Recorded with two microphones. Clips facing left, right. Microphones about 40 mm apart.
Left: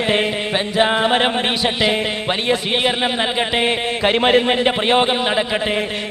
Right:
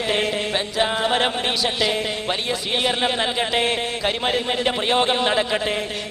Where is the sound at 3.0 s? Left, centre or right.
Centre.